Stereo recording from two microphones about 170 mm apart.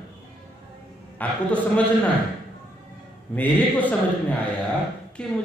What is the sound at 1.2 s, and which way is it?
Speech, 10° left (ahead or behind).